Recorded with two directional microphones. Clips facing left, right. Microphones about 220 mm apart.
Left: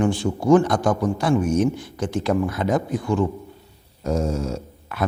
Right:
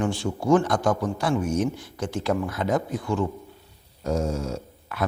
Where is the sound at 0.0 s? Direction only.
15° left (ahead or behind).